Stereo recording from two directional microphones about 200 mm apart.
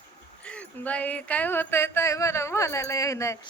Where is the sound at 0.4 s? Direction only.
5° left (ahead or behind).